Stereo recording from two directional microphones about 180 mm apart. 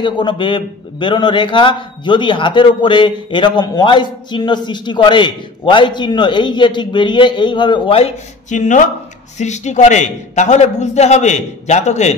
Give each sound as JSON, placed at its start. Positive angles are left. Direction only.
{"t": 0.0, "sound": "a man's voice", "side_deg": 25}